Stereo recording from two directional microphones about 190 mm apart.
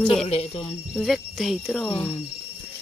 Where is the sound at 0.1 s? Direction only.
30° left (ahead or behind).